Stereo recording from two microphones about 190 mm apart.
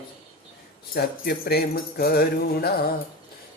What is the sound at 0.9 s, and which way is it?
Music, 55° left (ahead or behind).